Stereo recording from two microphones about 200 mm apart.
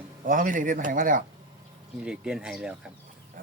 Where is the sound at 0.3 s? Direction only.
40° right (ahead or behind).